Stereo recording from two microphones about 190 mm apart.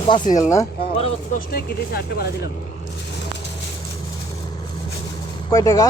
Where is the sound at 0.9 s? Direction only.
35° left (ahead or behind).